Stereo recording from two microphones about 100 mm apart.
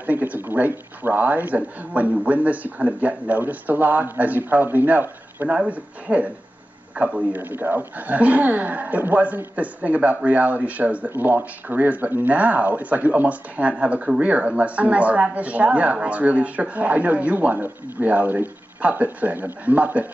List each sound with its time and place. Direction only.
0.0 s speech: 15° right (ahead or behind)